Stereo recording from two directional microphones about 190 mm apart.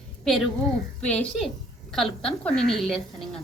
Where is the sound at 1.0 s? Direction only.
5° left (ahead or behind).